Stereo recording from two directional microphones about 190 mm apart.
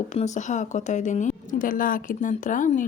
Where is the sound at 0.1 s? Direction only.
35° left (ahead or behind).